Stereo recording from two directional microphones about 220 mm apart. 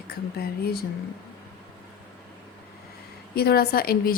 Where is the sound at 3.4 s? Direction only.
45° left (ahead or behind).